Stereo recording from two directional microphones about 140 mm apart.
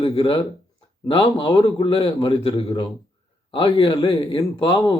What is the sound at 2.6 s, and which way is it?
A man's voice, 40° left (ahead or behind).